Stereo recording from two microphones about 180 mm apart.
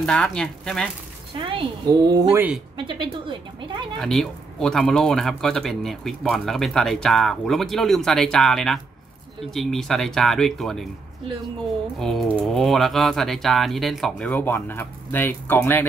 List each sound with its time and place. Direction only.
0.0 s speech: 5° left (ahead or behind)
1.5 s speech: 25° right (ahead or behind)
2.2 s speech: 5° right (ahead or behind)
2.9 s speech: 25° right (ahead or behind)
4.0 s speech: centre (ahead or behind)
12.0 s speech: centre (ahead or behind)